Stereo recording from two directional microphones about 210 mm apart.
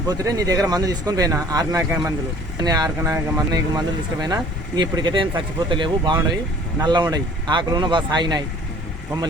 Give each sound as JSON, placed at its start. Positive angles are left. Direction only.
{"t": 0.1, "sound": "speech", "side_deg": -15}